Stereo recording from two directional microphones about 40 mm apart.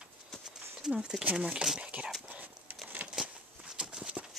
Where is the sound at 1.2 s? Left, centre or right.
Right.